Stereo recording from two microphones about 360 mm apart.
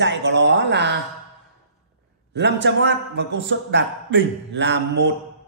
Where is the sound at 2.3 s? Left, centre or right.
Right.